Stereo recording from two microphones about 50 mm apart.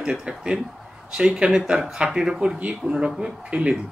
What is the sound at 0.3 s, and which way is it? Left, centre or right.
A man's voice, centre.